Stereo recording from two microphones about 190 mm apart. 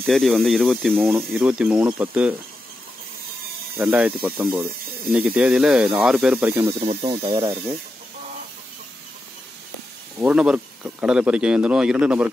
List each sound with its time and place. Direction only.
0.0 s speech: centre (ahead or behind)
3.7 s speech: 10° right (ahead or behind)
6.8 s speech: 30° right (ahead or behind)
10.2 s speech: 5° right (ahead or behind)